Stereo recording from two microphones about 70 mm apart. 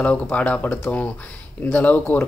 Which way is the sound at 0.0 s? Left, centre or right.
Left.